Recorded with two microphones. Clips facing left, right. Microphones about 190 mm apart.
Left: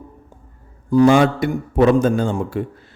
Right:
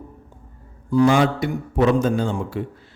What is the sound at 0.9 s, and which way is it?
A man's voice, 45° left (ahead or behind).